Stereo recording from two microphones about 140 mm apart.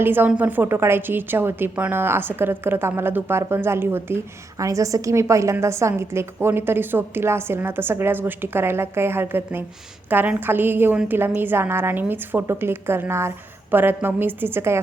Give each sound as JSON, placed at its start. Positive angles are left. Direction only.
{"t": 0.0, "sound": "a woman's voice", "side_deg": -15}